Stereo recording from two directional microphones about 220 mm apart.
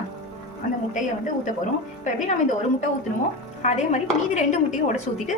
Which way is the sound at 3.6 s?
30° left (ahead or behind).